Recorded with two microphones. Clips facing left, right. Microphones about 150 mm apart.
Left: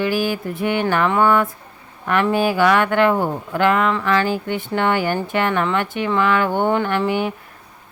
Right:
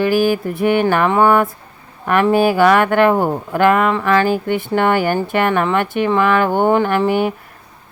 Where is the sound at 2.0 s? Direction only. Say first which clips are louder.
Right 4 dB; 45° right (ahead or behind).